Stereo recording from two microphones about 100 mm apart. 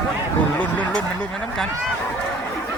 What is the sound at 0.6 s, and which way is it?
Speech, 15° left (ahead or behind).